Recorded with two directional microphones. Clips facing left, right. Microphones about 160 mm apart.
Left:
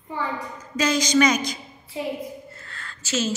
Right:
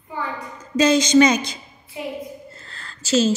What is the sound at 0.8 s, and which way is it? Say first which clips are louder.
Speech: right 5 dB; 25° right (ahead or behind).